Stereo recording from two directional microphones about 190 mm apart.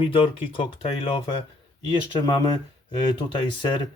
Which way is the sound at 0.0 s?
30° left (ahead or behind).